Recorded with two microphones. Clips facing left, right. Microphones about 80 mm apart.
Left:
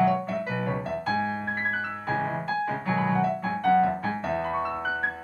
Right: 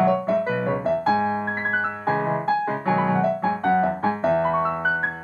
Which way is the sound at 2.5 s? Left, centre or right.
Right.